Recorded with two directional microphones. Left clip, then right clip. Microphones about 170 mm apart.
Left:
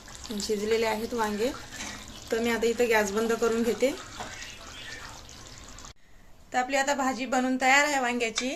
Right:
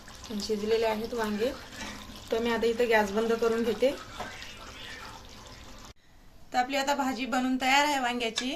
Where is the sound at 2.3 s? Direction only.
25° left (ahead or behind).